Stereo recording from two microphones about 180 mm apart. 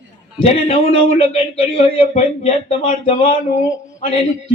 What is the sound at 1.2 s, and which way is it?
Speech, 35° left (ahead or behind).